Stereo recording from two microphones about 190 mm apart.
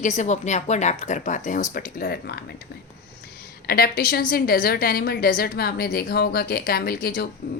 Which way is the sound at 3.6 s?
50° left (ahead or behind).